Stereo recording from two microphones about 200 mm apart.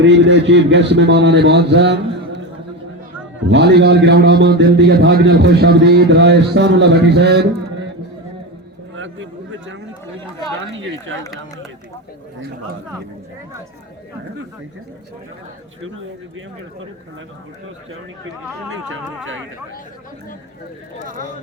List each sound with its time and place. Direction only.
0.0 s a man's voice: 60° right (ahead or behind)
3.5 s a man's voice: 60° right (ahead or behind)
9.0 s a sound: 70° right (ahead or behind)
10.8 s speech: 70° right (ahead or behind)